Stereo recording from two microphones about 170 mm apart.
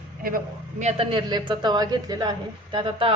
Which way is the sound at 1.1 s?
25° right (ahead or behind).